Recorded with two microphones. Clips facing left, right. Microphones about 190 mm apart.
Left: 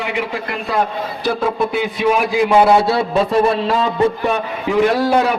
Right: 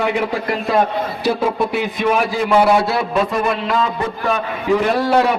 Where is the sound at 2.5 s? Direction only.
25° left (ahead or behind).